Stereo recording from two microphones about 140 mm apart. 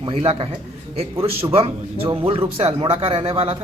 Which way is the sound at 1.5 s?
45° right (ahead or behind).